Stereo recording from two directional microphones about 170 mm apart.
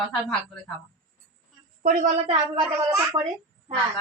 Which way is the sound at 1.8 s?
50° right (ahead or behind).